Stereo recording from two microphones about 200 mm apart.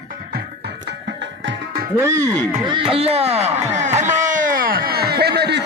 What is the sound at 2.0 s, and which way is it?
Speech, 15° right (ahead or behind).